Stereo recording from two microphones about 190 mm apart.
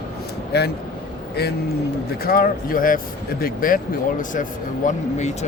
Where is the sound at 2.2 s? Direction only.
50° left (ahead or behind).